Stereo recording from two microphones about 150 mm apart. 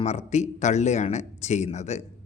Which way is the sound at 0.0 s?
45° left (ahead or behind).